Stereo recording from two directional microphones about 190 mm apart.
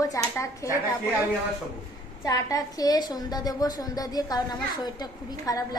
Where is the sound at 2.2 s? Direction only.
20° left (ahead or behind).